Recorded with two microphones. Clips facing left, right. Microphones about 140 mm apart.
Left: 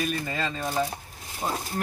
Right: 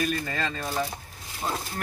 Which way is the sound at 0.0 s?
10° left (ahead or behind).